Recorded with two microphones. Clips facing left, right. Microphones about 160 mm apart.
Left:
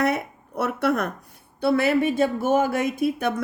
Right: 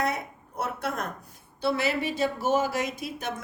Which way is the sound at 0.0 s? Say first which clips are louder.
Left 6 dB; 65° left (ahead or behind).